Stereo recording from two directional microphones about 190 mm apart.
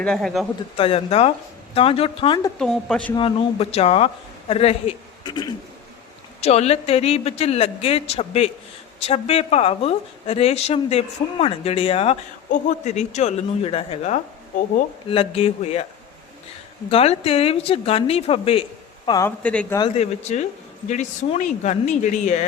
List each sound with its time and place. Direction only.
0.0 s a woman's voice: 5° left (ahead or behind)
0.8 s a woman's voice: 30° left (ahead or behind)
2.6 s a woman's voice: 5° left (ahead or behind)
3.2 s a woman's voice: 30° left (ahead or behind)
6.4 s a woman's voice: 35° left (ahead or behind)
16.9 s a woman's voice: 30° left (ahead or behind)
19.0 s speech: 20° left (ahead or behind)
19.4 s speech: 5° left (ahead or behind)
19.9 s a woman's voice: 35° left (ahead or behind)